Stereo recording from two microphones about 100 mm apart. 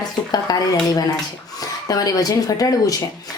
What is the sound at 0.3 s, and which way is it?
Dishes, 40° left (ahead or behind).